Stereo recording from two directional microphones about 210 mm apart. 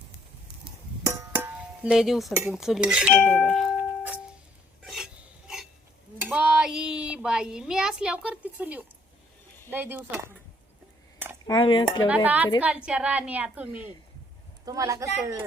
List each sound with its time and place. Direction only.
0.6 s a sound: 10° right (ahead or behind)
3.2 s speech: centre (ahead or behind)
3.8 s music: 5° right (ahead or behind)
4.8 s stir: 5° right (ahead or behind)
6.1 s a woman's voice: 5° right (ahead or behind)
11.4 s dishes: 20° left (ahead or behind)
12.0 s a woman's voice: 5° right (ahead or behind)